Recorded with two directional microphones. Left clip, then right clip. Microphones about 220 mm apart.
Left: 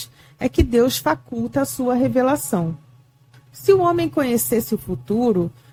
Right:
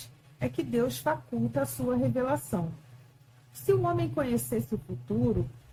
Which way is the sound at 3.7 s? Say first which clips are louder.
Left 11 dB; 45° left (ahead or behind).